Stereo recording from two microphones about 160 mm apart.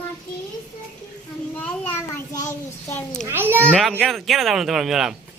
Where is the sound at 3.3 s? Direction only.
15° right (ahead or behind).